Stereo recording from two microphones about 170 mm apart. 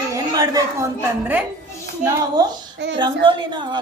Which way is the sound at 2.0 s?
25° right (ahead or behind).